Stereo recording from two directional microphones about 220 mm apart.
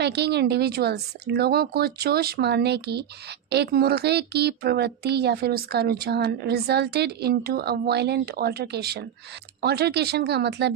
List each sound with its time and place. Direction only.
0.0 s speech: 50° right (ahead or behind)